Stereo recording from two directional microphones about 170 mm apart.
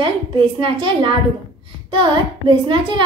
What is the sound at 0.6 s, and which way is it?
A child's voice, 30° right (ahead or behind).